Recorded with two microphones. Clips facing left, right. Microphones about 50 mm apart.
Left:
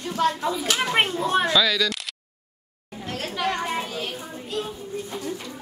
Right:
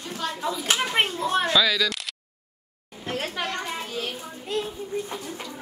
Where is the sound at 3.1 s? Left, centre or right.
Centre.